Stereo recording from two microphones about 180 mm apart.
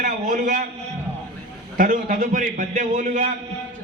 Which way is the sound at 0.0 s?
45° right (ahead or behind).